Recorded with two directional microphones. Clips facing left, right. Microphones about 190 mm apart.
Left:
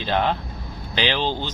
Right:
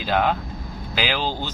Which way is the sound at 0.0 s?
5° right (ahead or behind).